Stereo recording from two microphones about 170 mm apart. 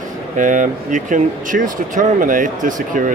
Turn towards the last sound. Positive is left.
turn(degrees=-50)  # may be behind; listen again after turning